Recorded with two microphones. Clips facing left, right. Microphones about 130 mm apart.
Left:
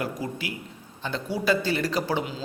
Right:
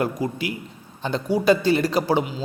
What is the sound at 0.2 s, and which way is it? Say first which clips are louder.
A man's voice: right 6 dB; 20° right (ahead or behind).